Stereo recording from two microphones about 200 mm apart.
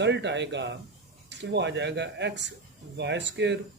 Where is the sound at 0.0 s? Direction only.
60° right (ahead or behind).